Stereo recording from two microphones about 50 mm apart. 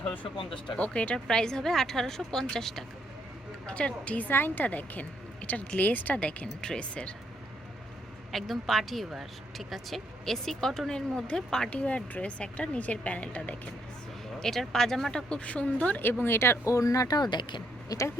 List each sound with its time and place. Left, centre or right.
0.8 s a woman's voice: left
3.7 s a woman's voice: left
4.3 s a woman's voice: left
6.1 s a woman's voice: left
8.3 s a woman's voice: centre
11.1 s a woman's voice: left
11.3 s a woman's voice: centre
11.7 s a woman's voice: left
14.3 s a woman's voice: centre
15.3 s a woman's voice: left
16.0 s speech: left
16.6 s speech: left